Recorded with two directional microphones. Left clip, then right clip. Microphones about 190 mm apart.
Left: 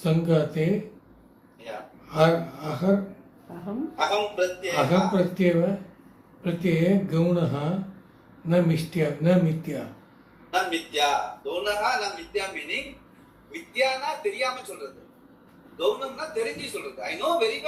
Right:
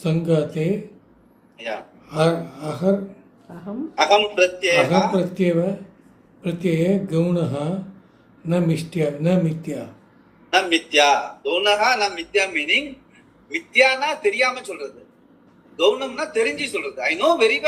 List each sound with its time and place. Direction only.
0.0 s a man's voice: 40° right (ahead or behind)
3.9 s a man's voice: 40° right (ahead or behind)
15.8 s a man's voice: 40° right (ahead or behind)